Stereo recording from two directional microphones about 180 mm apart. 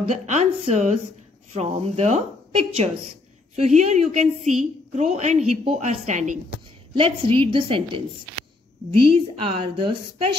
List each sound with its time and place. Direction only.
0.0 s a woman's voice: 40° right (ahead or behind)
7.0 s a woman's voice: 30° right (ahead or behind)
9.0 s a woman's voice: 30° right (ahead or behind)